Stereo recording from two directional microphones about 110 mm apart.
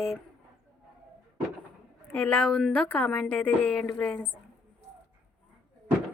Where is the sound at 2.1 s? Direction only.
10° left (ahead or behind).